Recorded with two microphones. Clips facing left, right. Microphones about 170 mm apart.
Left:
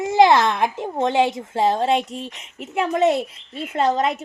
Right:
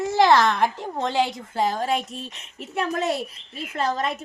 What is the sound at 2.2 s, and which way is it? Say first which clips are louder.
Speech: left 4 dB; 90° left.